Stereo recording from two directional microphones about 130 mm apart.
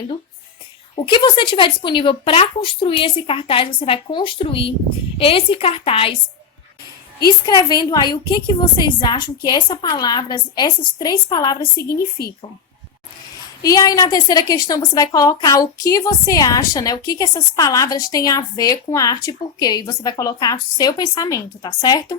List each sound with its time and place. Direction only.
0.9 s speech: 40° left (ahead or behind)
7.3 s a woman's voice: 30° left (ahead or behind)
13.6 s a woman's voice: 30° left (ahead or behind)